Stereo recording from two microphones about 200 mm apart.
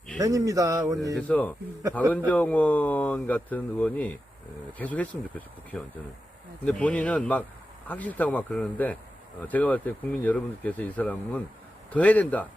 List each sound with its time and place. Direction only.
0.2 s speech: 15° right (ahead or behind)
1.3 s a man's voice: 10° left (ahead or behind)